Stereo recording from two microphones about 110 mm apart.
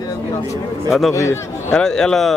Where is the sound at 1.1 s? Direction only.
25° left (ahead or behind).